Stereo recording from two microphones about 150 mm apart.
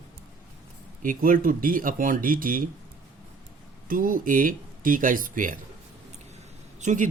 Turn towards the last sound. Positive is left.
turn(degrees=-55)  # may be behind; listen again after turning